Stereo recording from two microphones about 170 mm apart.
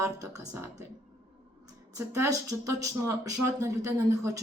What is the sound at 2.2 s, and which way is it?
Speech, 20° right (ahead or behind).